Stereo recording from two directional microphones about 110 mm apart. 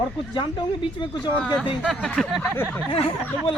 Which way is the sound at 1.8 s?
5° left (ahead or behind).